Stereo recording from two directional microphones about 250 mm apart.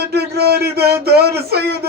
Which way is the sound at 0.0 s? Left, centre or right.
Right.